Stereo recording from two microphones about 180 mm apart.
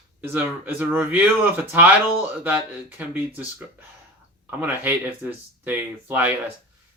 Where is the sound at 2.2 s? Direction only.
10° right (ahead or behind).